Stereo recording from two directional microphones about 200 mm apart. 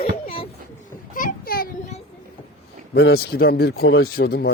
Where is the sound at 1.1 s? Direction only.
45° left (ahead or behind).